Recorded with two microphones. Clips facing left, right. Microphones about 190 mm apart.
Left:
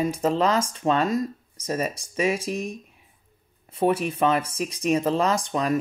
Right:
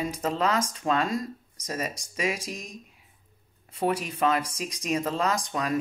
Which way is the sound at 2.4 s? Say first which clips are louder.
Left 9 dB; 65° left (ahead or behind).